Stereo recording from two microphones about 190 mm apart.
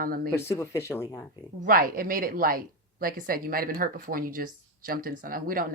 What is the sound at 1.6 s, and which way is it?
A woman's voice, 50° right (ahead or behind).